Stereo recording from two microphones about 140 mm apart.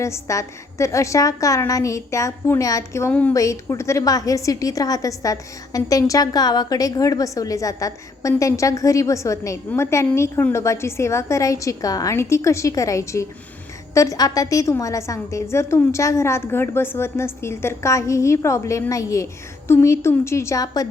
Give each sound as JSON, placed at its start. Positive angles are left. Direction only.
{"t": 0.0, "sound": "a woman's voice", "side_deg": 20}
{"t": 3.1, "sound": "a woman's voice", "side_deg": 10}
{"t": 3.3, "sound": "a woman's voice", "side_deg": 25}